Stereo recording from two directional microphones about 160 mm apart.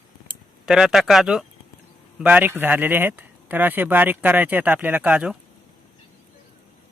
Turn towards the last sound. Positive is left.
turn(degrees=-5)  # may be behind; listen again after turning